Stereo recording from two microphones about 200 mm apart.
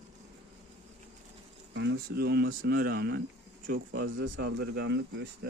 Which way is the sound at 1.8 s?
55° right (ahead or behind).